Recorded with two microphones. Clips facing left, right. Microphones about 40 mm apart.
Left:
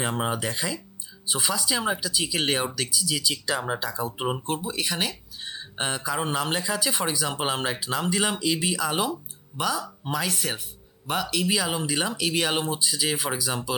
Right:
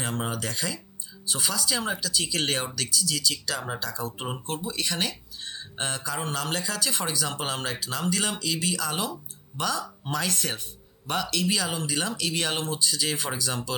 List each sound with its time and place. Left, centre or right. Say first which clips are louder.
0.0 s speech: left 4 dB; left